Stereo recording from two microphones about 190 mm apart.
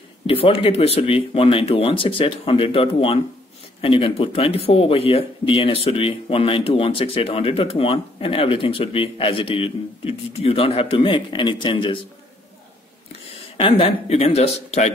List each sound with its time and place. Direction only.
0.3 s speech: 30° left (ahead or behind)
13.6 s speech: 30° left (ahead or behind)